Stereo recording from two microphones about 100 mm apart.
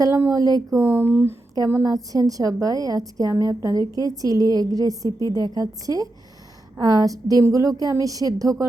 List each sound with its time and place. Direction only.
0.0 s a woman's voice: 25° right (ahead or behind)
0.8 s speech: 20° right (ahead or behind)
1.7 s a woman's voice: 35° right (ahead or behind)